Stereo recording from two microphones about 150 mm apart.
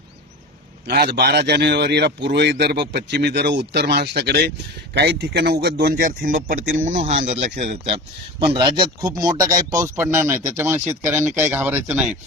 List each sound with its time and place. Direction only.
0.9 s a man's voice: 90° right; by 7.0 s 70° right (ahead or behind)
7.0 s speech: 50° right (ahead or behind)
8.6 s speech: 30° right (ahead or behind)
9.6 s speech: 65° right (ahead or behind)
9.8 s speech: 20° right (ahead or behind)